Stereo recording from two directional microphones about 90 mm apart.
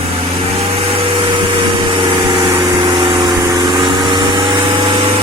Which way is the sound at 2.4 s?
70° right (ahead or behind).